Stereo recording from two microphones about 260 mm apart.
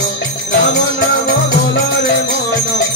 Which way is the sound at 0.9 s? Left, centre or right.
Left.